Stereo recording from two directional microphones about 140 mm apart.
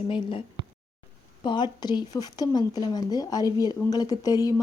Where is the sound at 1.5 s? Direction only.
35° left (ahead or behind).